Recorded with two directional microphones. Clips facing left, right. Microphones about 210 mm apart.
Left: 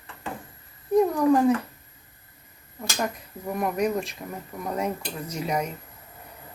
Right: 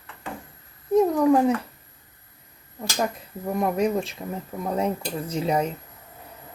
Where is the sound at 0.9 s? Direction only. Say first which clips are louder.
Right 1 dB; 25° right (ahead or behind).